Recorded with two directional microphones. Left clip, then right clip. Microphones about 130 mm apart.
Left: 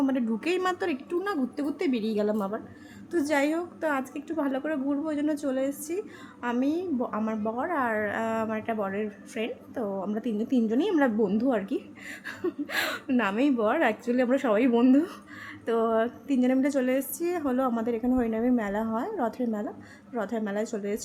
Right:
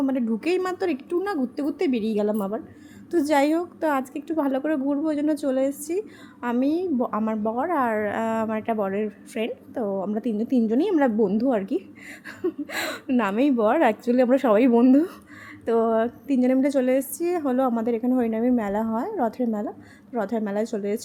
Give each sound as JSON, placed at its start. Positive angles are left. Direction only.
{"t": 0.1, "sound": "a woman's voice", "side_deg": -20}
{"t": 0.9, "sound": "a woman's voice", "side_deg": -30}
{"t": 3.1, "sound": "a woman's voice", "side_deg": -40}
{"t": 9.8, "sound": "a woman's voice", "side_deg": -20}
{"t": 10.9, "sound": "a woman's voice", "side_deg": -20}
{"t": 12.2, "sound": "a woman's voice", "side_deg": -10}
{"t": 12.6, "sound": "a woman's voice", "side_deg": -25}
{"t": 14.7, "sound": "a woman's voice", "side_deg": -25}